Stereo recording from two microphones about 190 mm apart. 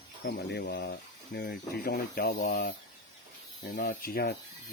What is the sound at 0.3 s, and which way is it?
Speech, 60° left (ahead or behind).